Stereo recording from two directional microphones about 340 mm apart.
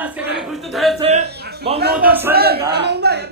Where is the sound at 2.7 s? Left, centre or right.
Right.